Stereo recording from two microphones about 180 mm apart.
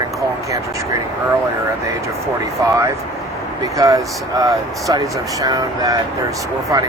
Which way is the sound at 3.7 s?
20° right (ahead or behind).